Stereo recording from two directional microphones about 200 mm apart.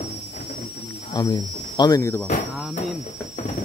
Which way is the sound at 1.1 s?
20° left (ahead or behind).